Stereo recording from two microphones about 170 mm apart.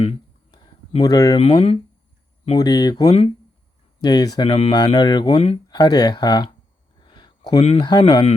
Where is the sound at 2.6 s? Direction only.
25° left (ahead or behind).